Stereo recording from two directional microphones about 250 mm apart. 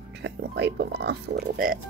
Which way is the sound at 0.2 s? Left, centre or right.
Right.